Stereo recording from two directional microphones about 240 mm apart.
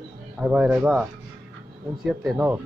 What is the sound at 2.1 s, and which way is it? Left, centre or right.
Speech, centre.